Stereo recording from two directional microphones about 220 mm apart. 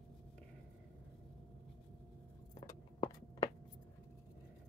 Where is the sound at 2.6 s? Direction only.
15° left (ahead or behind).